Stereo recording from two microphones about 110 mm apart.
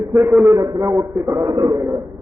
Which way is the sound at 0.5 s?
30° right (ahead or behind).